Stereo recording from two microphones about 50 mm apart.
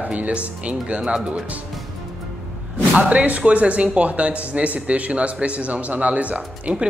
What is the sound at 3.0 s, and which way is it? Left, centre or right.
A man's voice, right.